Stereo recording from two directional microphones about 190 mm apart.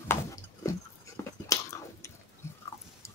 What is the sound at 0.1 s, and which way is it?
Chewing, 15° left (ahead or behind).